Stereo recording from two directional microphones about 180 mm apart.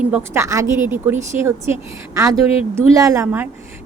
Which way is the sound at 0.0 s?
10° right (ahead or behind).